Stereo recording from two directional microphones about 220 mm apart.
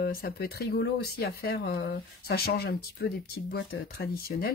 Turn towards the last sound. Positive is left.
turn(degrees=45)  # may be behind; listen again after turning